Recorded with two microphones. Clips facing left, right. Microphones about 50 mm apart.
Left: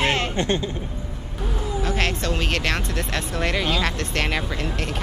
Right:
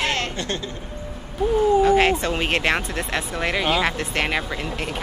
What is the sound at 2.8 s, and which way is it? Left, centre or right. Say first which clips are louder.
Speech: right 1 dB; centre.